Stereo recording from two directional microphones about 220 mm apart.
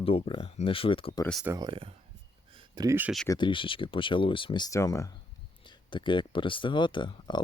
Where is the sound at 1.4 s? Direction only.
15° right (ahead or behind).